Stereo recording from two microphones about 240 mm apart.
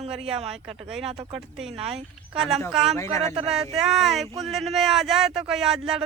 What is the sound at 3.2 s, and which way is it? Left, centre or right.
Speech, right.